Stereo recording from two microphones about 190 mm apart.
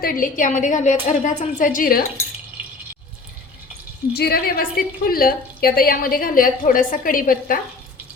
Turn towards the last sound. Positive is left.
turn(degrees=50)  # may be behind; listen again after turning